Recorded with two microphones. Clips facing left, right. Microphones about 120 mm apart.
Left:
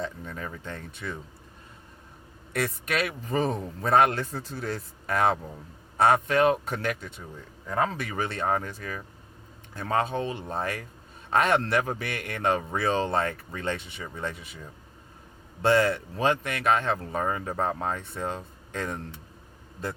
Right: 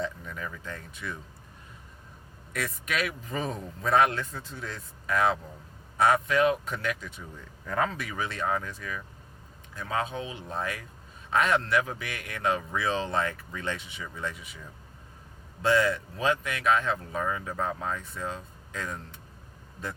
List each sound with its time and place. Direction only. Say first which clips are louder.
0.0 s speech: even; 35° left (ahead or behind)
2.8 s speech: left 2 dB; 45° left (ahead or behind)
6.0 s speech: left 2 dB; 30° left (ahead or behind)
15.9 s speech: left 2 dB; 45° left (ahead or behind)